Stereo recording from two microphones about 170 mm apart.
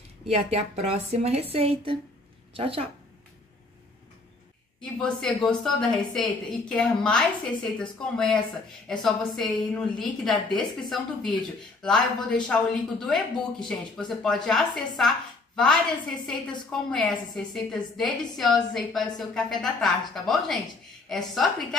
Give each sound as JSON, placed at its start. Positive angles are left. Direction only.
{"t": 0.3, "sound": "a woman's voice", "side_deg": -40}
{"t": 4.9, "sound": "speech", "side_deg": 5}